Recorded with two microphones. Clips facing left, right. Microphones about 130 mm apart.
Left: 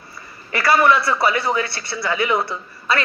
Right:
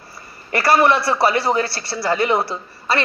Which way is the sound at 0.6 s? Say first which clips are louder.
Right 1 dB; 30° right (ahead or behind).